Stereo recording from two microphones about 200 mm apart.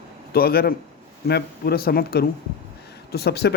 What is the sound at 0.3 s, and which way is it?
Speech, 50° left (ahead or behind).